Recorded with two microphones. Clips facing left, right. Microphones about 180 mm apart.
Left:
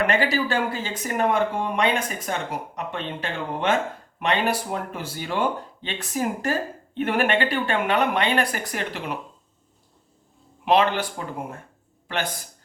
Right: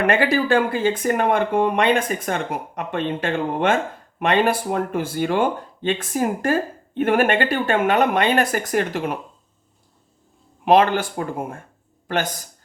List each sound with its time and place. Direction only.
0.1 s speech: 55° right (ahead or behind)
10.7 s speech: 45° right (ahead or behind)